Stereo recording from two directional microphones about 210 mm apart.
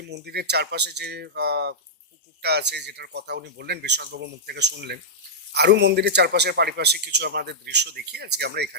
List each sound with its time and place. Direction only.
0.0 s a man's voice: 50° right (ahead or behind)